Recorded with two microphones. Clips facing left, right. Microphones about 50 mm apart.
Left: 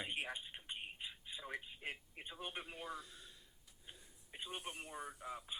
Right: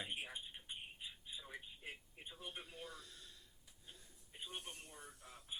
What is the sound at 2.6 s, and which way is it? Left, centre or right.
Speech, left.